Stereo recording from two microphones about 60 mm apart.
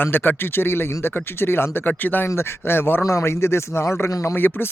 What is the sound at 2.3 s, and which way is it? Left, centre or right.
Speech, left.